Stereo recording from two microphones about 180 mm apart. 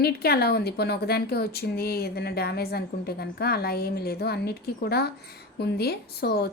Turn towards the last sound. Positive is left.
turn(degrees=60)  # may be behind; listen again after turning